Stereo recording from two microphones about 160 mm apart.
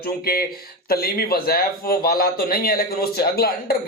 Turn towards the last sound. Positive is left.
turn(degrees=75)  # may be behind; listen again after turning